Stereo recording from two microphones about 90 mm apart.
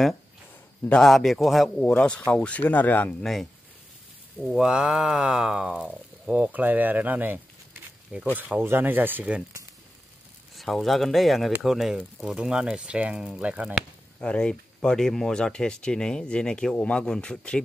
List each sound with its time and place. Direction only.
0.8 s speech: 5° left (ahead or behind)
1.8 s speech: 10° left (ahead or behind)
4.5 s speech: 5° right (ahead or behind)
8.4 s speech: 20° right (ahead or behind)
10.5 s speech: centre (ahead or behind); by 13.7 s 15° right (ahead or behind)
14.2 s speech: 10° left (ahead or behind)